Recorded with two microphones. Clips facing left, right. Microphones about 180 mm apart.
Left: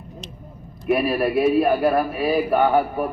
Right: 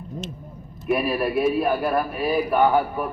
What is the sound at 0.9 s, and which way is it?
Speech, 5° left (ahead or behind).